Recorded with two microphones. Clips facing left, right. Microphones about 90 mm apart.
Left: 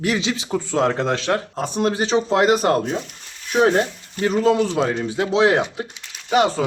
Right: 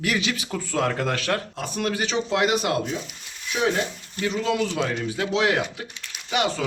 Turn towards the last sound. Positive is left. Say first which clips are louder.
# left 7 dB
turn(degrees=35)  # may be behind; listen again after turning